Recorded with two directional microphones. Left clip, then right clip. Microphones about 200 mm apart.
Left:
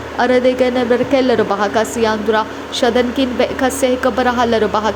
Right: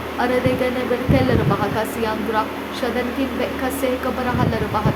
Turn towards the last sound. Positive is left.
turn(degrees=35)  # may be behind; listen again after turning